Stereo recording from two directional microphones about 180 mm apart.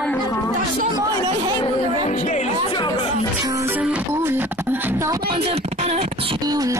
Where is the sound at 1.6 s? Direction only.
40° left (ahead or behind).